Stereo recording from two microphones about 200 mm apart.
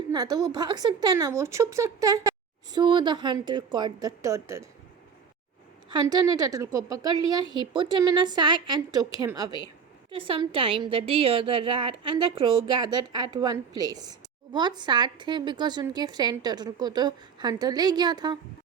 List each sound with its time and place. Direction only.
0.1 s a woman's voice: 20° right (ahead or behind)
5.9 s a woman's voice: 20° right (ahead or behind)